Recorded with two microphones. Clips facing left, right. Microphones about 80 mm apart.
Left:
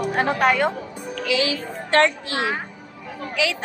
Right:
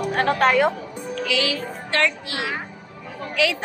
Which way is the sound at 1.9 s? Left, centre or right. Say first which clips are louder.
Left 5 dB; left.